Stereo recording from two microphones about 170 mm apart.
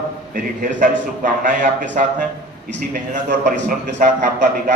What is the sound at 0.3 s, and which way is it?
A man's voice, 50° right (ahead or behind).